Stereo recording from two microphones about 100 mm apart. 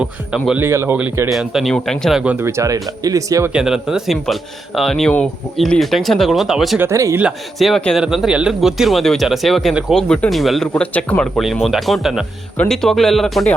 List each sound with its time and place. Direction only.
0.5 s speech: 25° right (ahead or behind)
1.3 s speech: 5° right (ahead or behind)
2.1 s speech: 10° right (ahead or behind)
2.4 s speech: 30° right (ahead or behind)
3.5 s speech: 5° right (ahead or behind)
6.7 s speech: 30° right (ahead or behind)
7.6 s speech: centre (ahead or behind)
11.6 s speech: centre (ahead or behind)